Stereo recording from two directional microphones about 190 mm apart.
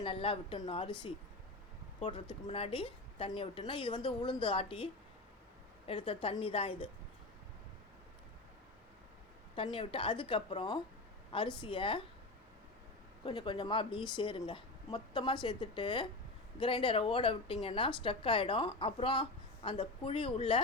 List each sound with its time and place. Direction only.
0.0 s a woman's voice: 30° left (ahead or behind)
2.5 s a woman's voice: 30° left (ahead or behind)
5.9 s a woman's voice: 30° left (ahead or behind)
9.6 s a woman's voice: 30° left (ahead or behind)
13.2 s a woman's voice: 25° left (ahead or behind)